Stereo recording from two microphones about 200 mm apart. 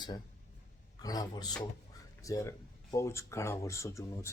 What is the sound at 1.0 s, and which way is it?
Speech, 20° left (ahead or behind).